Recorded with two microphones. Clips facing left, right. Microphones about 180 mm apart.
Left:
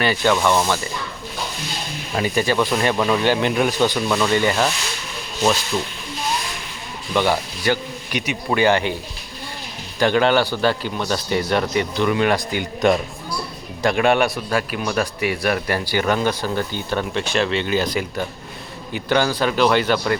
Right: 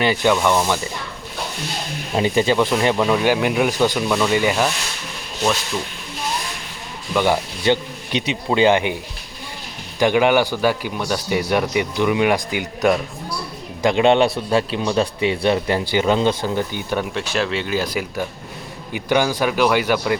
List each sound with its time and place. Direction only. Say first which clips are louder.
0.0 s a man's voice: right 1 dB; 15° right (ahead or behind)
2.1 s a man's voice: right 2 dB; 20° right (ahead or behind)
7.3 s speech: right 2 dB; 20° right (ahead or behind)
10.0 s a man's voice: right 1 dB; 15° right (ahead or behind)